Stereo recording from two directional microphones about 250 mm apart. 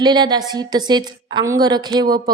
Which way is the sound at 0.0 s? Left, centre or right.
Centre.